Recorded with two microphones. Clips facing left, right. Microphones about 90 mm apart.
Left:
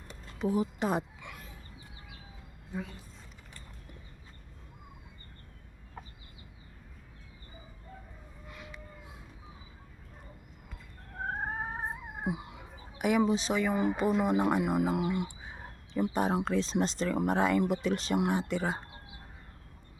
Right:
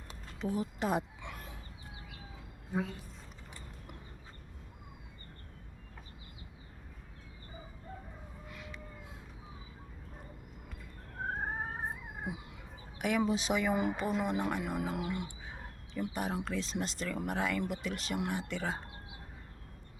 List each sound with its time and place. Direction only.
0.3 s speech: 10° left (ahead or behind)
0.8 s speech: centre (ahead or behind)
8.4 s a sound: centre (ahead or behind)
11.6 s cat: 20° left (ahead or behind)
13.2 s speech: 5° right (ahead or behind)
13.9 s speech: 5° left (ahead or behind)
16.0 s speech: 30° left (ahead or behind)